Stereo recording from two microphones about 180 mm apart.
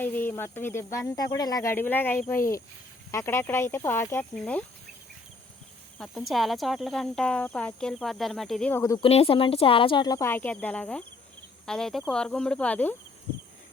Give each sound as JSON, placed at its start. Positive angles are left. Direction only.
{"t": 0.0, "sound": "speech", "side_deg": 10}
{"t": 6.0, "sound": "speech", "side_deg": 0}
{"t": 9.0, "sound": "speech", "side_deg": 30}
{"t": 11.6, "sound": "cricket", "side_deg": 5}
{"t": 12.1, "sound": "speech", "side_deg": 5}